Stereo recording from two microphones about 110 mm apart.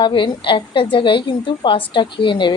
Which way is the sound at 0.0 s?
45° left (ahead or behind).